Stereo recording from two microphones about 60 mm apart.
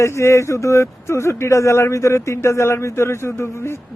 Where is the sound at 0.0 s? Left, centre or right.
Left.